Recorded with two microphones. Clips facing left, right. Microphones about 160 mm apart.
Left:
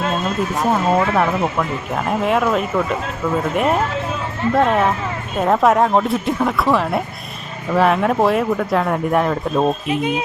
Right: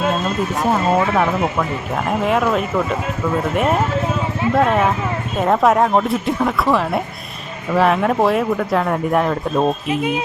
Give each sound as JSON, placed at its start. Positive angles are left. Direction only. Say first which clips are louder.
{"t": 0.6, "sound": "speech", "louder": "even", "side_deg": 0}
{"t": 10.0, "sound": "speech", "louder": "even", "side_deg": 25}